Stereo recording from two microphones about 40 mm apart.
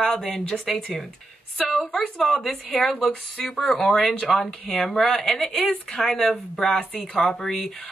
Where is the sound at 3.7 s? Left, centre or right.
Centre.